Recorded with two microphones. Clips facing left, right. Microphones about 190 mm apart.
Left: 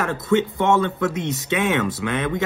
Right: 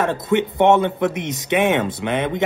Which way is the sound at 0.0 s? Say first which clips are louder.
Right 1 dB; 20° right (ahead or behind).